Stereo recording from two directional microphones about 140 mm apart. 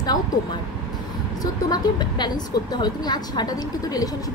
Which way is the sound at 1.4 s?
30° left (ahead or behind).